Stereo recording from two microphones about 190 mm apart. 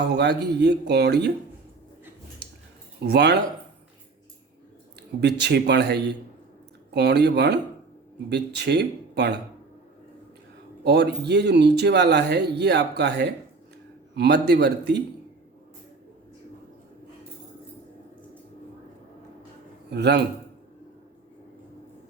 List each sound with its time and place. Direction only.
0.2 s speech: 60° right (ahead or behind)
3.0 s speech: 60° right (ahead or behind)
5.2 s speech: 60° right (ahead or behind)
10.8 s speech: 60° right (ahead or behind)
19.9 s speech: 60° right (ahead or behind)